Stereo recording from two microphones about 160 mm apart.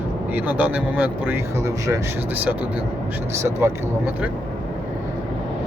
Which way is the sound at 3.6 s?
15° right (ahead or behind).